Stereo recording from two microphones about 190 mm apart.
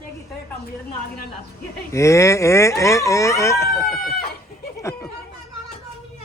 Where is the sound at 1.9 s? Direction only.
15° left (ahead or behind).